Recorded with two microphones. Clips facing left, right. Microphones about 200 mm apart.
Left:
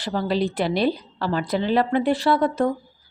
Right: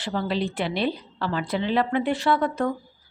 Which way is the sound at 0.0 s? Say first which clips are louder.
Left 3 dB; 40° left (ahead or behind).